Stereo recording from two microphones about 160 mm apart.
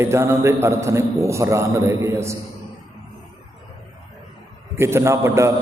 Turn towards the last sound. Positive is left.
turn(degrees=-15)  # may be behind; listen again after turning